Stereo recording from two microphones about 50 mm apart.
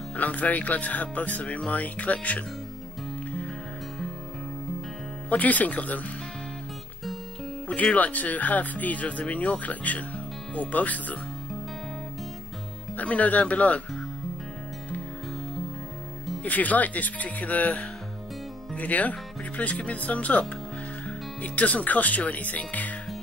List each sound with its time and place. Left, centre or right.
0.1 s speech: left
5.3 s speech: left
7.8 s speech: left
12.9 s speech: left
16.4 s speech: left